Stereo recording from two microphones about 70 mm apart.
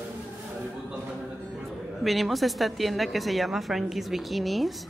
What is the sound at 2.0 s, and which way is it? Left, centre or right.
A woman's voice, centre.